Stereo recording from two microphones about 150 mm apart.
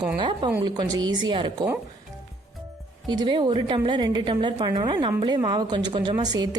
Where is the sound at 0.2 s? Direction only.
35° right (ahead or behind).